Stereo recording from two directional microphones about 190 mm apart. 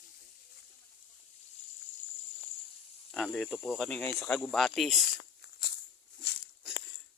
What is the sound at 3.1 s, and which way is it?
Speech, centre (ahead or behind).